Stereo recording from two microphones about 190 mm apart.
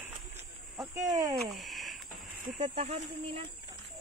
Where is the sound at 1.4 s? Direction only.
Centre (ahead or behind).